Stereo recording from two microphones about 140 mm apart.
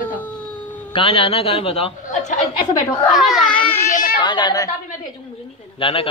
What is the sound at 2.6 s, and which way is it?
Speech, 25° left (ahead or behind).